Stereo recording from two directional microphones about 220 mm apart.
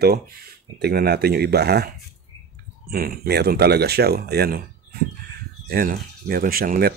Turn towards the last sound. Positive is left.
turn(degrees=-40)  # may be behind; listen again after turning